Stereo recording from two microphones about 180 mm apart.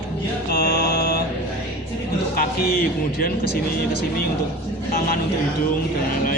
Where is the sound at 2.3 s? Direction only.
55° left (ahead or behind).